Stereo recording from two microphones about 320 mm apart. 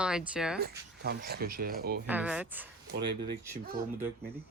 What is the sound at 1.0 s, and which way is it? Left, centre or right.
Speech, right.